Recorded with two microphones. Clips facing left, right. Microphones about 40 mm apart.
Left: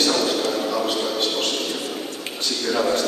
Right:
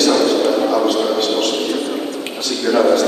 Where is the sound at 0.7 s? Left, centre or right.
Right.